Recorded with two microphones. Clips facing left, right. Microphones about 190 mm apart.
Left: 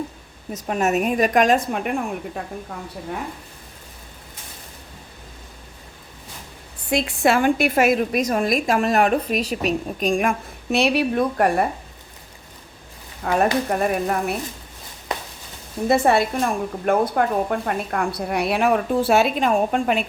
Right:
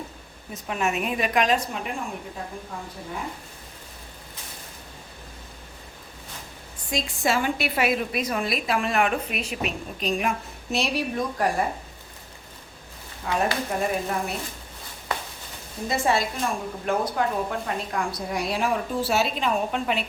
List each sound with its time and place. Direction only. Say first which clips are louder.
0.5 s a woman's voice: left 6 dB; 40° left (ahead or behind); by 2.4 s 60° left (ahead or behind)
6.9 s a woman's voice: left 6 dB; 65° left (ahead or behind)
13.2 s a woman's voice: left 6 dB; 60° left (ahead or behind)
15.9 s a woman's voice: left 7 dB; 60° left (ahead or behind)